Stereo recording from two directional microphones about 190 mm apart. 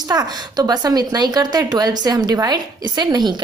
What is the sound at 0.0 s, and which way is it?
A woman's voice, 20° right (ahead or behind).